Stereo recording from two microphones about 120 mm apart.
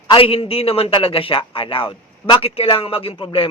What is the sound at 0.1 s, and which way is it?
A man's voice, 50° left (ahead or behind).